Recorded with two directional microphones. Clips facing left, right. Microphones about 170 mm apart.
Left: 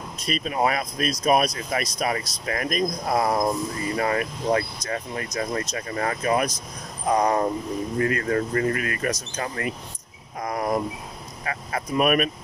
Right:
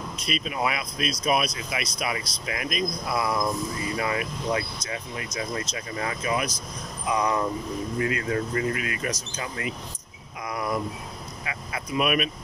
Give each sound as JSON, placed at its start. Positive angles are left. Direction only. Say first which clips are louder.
{"t": 0.3, "sound": "speech", "louder": "left 4 dB", "side_deg": 40}
{"t": 10.4, "sound": "cricket", "louder": "left 4 dB", "side_deg": 40}
{"t": 11.4, "sound": "speech", "louder": "left 6 dB", "side_deg": 45}